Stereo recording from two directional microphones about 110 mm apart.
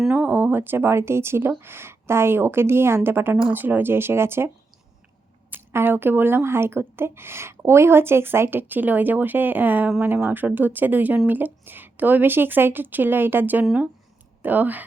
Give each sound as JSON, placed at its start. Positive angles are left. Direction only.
{"t": 0.1, "sound": "a woman's voice", "side_deg": -15}